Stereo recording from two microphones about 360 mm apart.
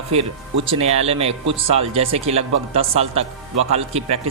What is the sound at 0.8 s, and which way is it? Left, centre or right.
Speech, centre.